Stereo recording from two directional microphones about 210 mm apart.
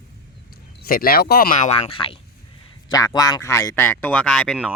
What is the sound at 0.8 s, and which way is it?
Speech, 45° left (ahead or behind).